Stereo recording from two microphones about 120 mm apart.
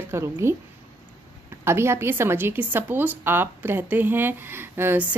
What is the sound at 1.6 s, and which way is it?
A woman's voice, 20° right (ahead or behind).